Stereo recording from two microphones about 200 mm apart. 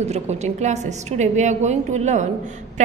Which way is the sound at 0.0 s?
35° right (ahead or behind).